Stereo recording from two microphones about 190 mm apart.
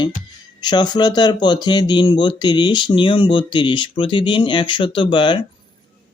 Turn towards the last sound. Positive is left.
turn(degrees=25)  # may be behind; listen again after turning